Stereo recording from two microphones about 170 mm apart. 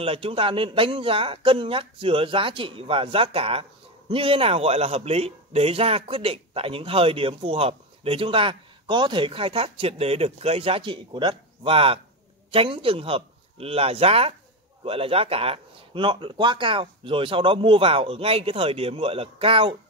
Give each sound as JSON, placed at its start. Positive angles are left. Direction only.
{"t": 0.0, "sound": "a man's voice", "side_deg": -35}